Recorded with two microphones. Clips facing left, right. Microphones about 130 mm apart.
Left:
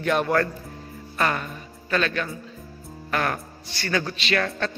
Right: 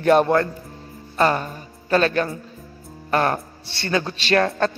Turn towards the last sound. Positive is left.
turn(degrees=-40)  # may be behind; listen again after turning